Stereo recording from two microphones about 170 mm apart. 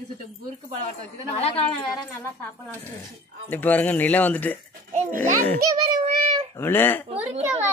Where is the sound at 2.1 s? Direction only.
10° left (ahead or behind).